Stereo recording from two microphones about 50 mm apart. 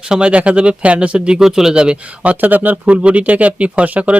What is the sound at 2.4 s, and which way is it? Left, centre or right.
Speech, right.